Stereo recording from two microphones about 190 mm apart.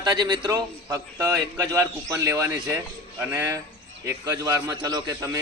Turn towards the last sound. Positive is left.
turn(degrees=-15)  # may be behind; listen again after turning